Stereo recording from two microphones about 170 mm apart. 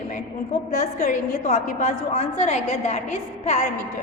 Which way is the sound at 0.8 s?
40° left (ahead or behind).